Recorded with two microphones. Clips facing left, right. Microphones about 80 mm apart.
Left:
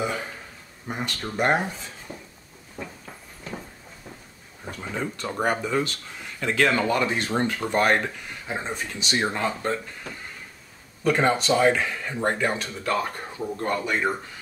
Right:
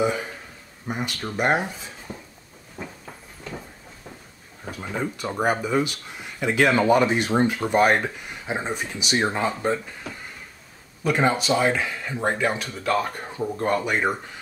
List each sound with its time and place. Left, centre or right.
0.8 s speech: centre
4.6 s speech: centre
11.1 s speech: centre
13.6 s speech: right